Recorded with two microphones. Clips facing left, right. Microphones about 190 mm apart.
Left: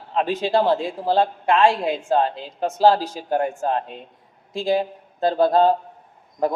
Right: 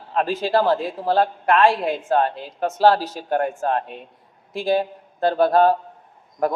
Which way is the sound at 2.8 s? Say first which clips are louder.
Even; 10° left (ahead or behind).